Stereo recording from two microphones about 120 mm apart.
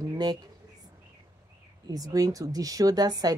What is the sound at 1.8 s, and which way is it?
Speech, 30° right (ahead or behind).